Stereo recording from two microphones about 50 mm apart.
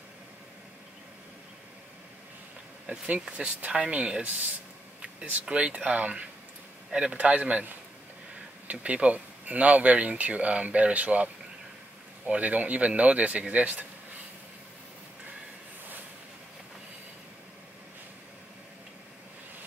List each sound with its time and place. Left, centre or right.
2.9 s a man's voice: right
8.7 s speech: right
12.3 s speech: right